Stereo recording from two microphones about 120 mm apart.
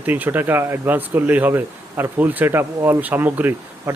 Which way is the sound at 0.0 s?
15° right (ahead or behind).